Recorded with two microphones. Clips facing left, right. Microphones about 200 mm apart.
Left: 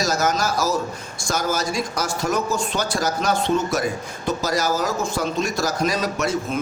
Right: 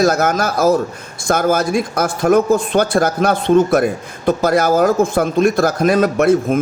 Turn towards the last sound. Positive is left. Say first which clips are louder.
# right 10 dB
turn(degrees=-55)  # may be behind; listen again after turning